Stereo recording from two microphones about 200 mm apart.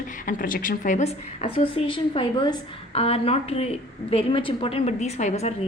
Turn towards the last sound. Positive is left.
turn(degrees=30)  # may be behind; listen again after turning